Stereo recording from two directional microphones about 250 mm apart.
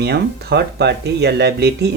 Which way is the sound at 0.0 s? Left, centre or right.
Right.